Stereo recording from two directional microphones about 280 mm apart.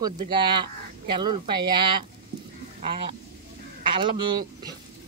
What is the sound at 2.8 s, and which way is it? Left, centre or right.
Duck, right.